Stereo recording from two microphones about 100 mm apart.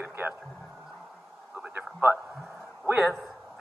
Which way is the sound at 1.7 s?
20° right (ahead or behind).